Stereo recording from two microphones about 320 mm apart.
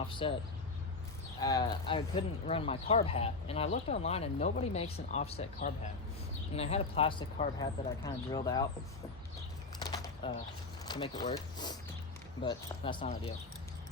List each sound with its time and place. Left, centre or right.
0.2 s speech: centre
1.4 s speech: centre
6.6 s speech: centre
9.8 s a sound: centre
10.8 s speech: centre